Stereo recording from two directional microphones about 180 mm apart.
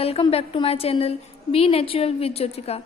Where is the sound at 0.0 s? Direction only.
35° left (ahead or behind).